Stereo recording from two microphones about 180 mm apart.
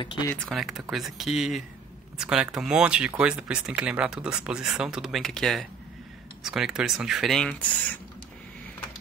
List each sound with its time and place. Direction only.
0.0 s speech: 25° left (ahead or behind)
0.3 s speech: 5° left (ahead or behind)